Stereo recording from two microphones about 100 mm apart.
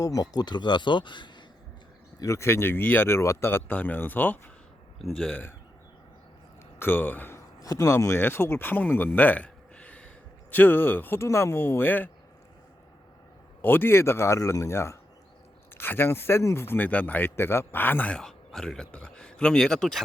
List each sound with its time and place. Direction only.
0.0 s speech: 35° left (ahead or behind)
2.1 s speech: 30° left (ahead or behind)
4.9 s speech: 5° left (ahead or behind)
6.7 s speech: 20° left (ahead or behind)
7.6 s speech: 35° left (ahead or behind); by 12.1 s 20° left (ahead or behind)
13.6 s speech: 20° left (ahead or behind); by 20.0 s 5° left (ahead or behind)